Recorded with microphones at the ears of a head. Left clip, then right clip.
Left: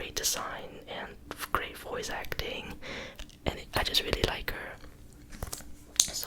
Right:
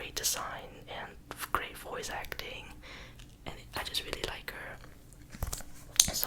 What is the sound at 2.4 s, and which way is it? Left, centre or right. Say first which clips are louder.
Whispering: left 6 dB; left.